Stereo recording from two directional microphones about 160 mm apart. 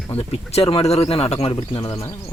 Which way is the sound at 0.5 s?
35° left (ahead or behind).